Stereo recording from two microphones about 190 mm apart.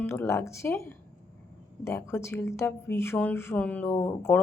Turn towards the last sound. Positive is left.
turn(degrees=10)  # may be behind; listen again after turning